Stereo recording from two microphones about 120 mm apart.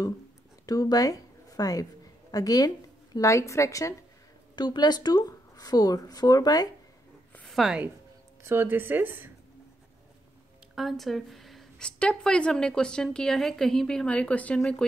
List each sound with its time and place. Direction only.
0.7 s a woman's voice: 30° left (ahead or behind)
4.6 s speech: 35° left (ahead or behind)
7.3 s a sound: centre (ahead or behind)
8.5 s speech: 20° right (ahead or behind)
10.7 s a woman's voice: centre (ahead or behind)